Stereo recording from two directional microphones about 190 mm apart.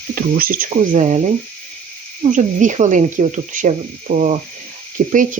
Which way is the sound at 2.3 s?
40° right (ahead or behind).